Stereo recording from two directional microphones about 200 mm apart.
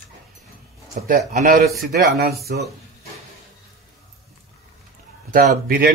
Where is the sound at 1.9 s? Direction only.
50° right (ahead or behind).